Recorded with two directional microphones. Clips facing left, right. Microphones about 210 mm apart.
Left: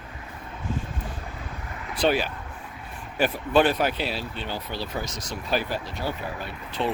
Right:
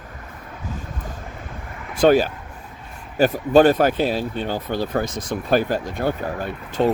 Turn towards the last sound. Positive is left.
turn(degrees=-45)  # may be behind; listen again after turning